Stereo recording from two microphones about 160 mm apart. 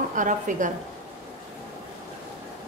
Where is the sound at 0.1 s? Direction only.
55° right (ahead or behind).